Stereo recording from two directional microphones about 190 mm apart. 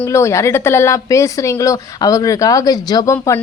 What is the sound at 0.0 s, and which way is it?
Speech, 15° left (ahead or behind).